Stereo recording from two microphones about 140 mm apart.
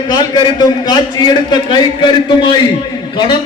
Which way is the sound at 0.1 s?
30° left (ahead or behind).